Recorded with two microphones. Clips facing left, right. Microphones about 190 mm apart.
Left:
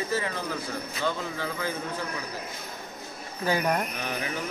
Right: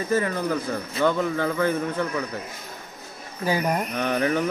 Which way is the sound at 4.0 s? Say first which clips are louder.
Right 9 dB; 60° right (ahead or behind).